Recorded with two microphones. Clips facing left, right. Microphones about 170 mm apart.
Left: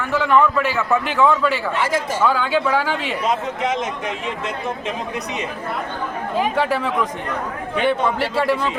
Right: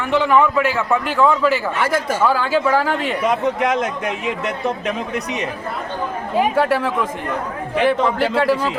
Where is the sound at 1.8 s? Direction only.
60° right (ahead or behind).